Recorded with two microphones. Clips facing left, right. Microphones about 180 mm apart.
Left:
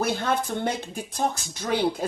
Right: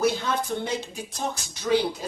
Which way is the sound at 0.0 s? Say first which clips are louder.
Right 1 dB; 55° left (ahead or behind).